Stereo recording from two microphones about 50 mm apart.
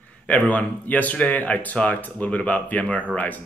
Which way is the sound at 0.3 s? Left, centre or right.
Left.